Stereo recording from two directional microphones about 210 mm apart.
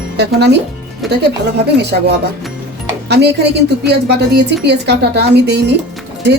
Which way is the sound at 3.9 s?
55° right (ahead or behind).